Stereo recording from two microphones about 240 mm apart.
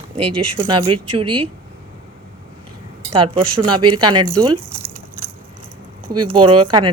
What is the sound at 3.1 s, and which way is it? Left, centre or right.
Speech, right.